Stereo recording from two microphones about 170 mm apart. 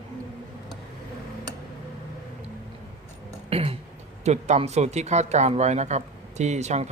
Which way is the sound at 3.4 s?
35° right (ahead or behind).